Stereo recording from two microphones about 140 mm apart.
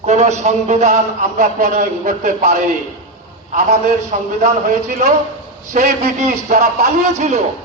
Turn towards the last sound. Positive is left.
turn(degrees=-55)  # may be behind; listen again after turning